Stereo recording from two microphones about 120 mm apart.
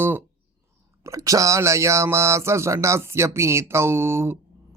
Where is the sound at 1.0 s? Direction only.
30° right (ahead or behind).